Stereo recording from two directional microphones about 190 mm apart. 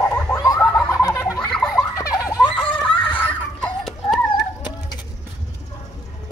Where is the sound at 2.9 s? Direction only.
25° left (ahead or behind).